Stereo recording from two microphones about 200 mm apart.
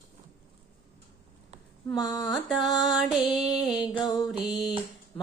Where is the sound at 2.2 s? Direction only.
Centre (ahead or behind).